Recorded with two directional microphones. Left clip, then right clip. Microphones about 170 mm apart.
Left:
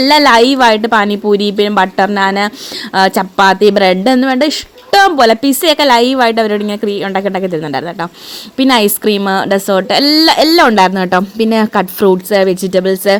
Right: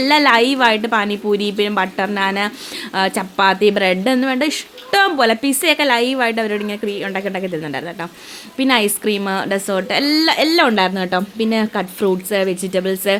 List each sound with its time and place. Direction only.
0.0 s a woman's voice: 30° left (ahead or behind)